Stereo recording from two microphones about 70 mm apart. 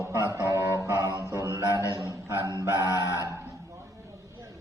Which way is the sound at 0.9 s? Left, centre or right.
Left.